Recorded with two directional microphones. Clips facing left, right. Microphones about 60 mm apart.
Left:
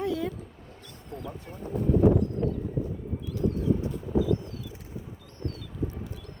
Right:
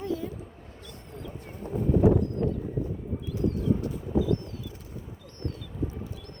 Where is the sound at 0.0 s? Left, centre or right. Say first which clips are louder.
Left 3 dB; left.